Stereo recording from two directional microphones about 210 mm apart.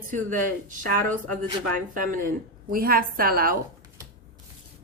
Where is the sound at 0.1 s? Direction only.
40° right (ahead or behind).